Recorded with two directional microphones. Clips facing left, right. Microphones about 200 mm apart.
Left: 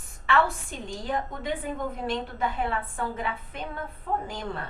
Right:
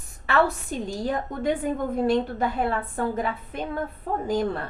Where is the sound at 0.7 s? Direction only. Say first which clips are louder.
Right 4 dB; 40° right (ahead or behind).